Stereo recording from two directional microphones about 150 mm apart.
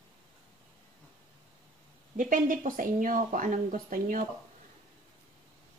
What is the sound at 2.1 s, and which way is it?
A woman's voice, 60° right (ahead or behind).